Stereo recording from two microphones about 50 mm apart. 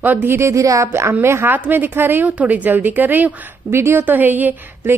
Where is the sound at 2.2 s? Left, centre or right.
Right.